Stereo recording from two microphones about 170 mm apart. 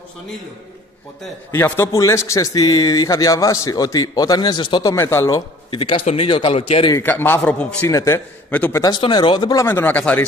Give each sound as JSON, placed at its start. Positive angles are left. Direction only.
{"t": 1.5, "sound": "a man's voice", "side_deg": 15}
{"t": 5.7, "sound": "a man's voice", "side_deg": 30}
{"t": 7.0, "sound": "a man's voice", "side_deg": 10}
{"t": 8.8, "sound": "a man's voice", "side_deg": 25}